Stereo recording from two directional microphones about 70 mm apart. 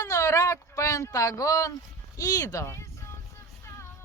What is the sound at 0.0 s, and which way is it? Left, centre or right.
Speech, left.